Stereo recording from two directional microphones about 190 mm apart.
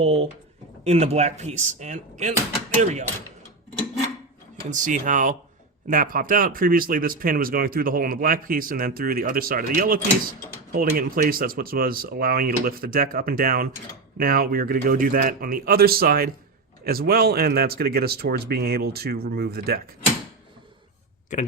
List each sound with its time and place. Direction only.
0.0 s drawer open or close: 35° right (ahead or behind)
0.9 s speech: 35° right (ahead or behind)
4.7 s speech: 40° right (ahead or behind)